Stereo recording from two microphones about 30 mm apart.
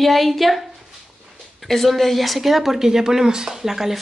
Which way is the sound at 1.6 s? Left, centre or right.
Centre.